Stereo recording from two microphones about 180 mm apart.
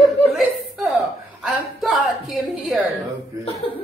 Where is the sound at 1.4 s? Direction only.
5° right (ahead or behind).